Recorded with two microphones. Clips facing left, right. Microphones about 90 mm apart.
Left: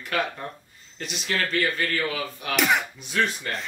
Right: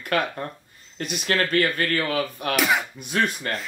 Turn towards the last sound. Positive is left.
turn(degrees=-50)  # may be behind; listen again after turning